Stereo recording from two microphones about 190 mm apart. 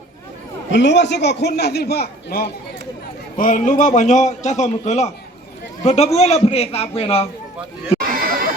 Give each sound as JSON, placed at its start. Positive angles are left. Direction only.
{"t": 0.7, "sound": "a man's voice", "side_deg": 70}
{"t": 3.3, "sound": "a man's voice", "side_deg": 45}
{"t": 7.9, "sound": "a sound", "side_deg": -50}